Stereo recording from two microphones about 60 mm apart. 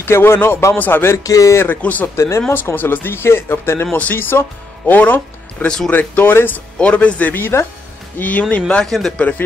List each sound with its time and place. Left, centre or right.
0.0 s speech: left
0.7 s speech: left
1.1 s speech: left
1.8 s speech: left
2.1 s speech: left
2.5 s speech: left
6.8 s speech: left
8.8 s speech: centre